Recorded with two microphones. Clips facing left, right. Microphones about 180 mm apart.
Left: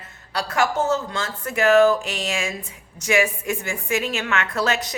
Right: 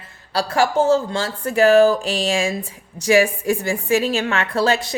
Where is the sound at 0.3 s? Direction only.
30° right (ahead or behind).